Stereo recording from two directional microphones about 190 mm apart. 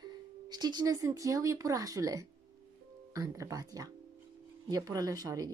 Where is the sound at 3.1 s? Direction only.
15° right (ahead or behind).